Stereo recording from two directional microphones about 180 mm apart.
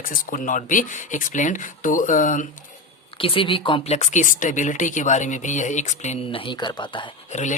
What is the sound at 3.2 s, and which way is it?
Speech, 30° left (ahead or behind).